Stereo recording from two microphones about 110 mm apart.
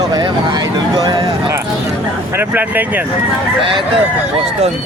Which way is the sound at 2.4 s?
15° right (ahead or behind).